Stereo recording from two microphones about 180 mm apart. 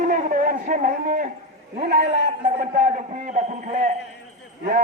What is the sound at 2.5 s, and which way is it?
A man's voice, 45° right (ahead or behind).